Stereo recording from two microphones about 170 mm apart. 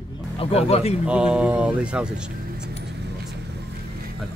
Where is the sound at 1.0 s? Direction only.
5° right (ahead or behind).